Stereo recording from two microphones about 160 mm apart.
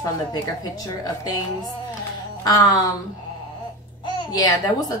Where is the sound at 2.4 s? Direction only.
25° left (ahead or behind).